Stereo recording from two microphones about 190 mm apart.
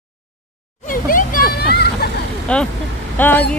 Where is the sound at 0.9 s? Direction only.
45° left (ahead or behind).